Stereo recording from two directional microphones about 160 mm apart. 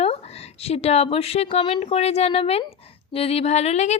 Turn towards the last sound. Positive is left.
turn(degrees=45)  # may be behind; listen again after turning